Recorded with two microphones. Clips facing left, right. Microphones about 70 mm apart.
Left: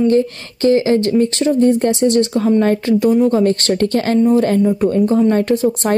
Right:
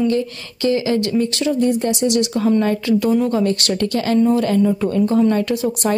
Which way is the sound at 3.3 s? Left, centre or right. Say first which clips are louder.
Left 4 dB; left.